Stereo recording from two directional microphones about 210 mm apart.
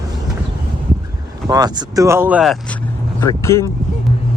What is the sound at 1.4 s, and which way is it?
Speech, 15° right (ahead or behind).